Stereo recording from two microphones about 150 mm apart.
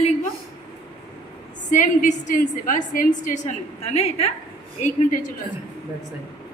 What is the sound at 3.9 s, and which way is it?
Speech, 45° left (ahead or behind).